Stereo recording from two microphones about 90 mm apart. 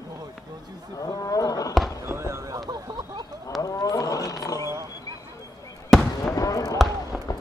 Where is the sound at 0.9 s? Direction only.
40° left (ahead or behind).